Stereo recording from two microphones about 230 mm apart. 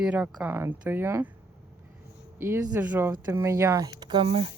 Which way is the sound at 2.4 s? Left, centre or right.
Centre.